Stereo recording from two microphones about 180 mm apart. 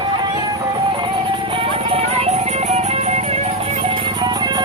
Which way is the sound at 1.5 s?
30° right (ahead or behind).